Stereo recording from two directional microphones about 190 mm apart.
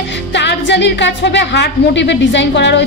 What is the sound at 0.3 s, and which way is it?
A woman's voice, 65° left (ahead or behind).